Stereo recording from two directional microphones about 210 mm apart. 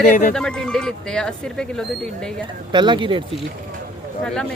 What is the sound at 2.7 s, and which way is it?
Speech, 20° right (ahead or behind).